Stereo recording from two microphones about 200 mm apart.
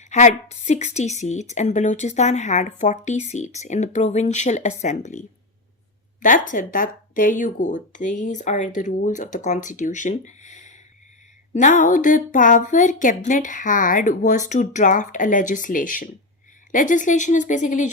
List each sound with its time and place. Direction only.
0.0 s a woman's voice: 35° left (ahead or behind)
6.2 s a woman's voice: 40° left (ahead or behind)